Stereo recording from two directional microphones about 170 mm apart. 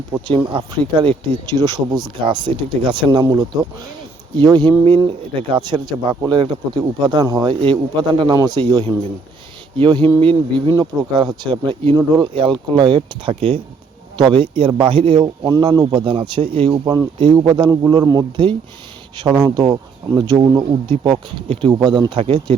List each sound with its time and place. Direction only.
0.3 s speech: 30° right (ahead or behind)
8.6 s speech: 35° right (ahead or behind)
16.8 s speech: 15° right (ahead or behind)